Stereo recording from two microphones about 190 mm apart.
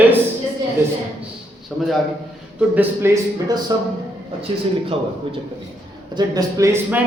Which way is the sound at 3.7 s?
20° right (ahead or behind).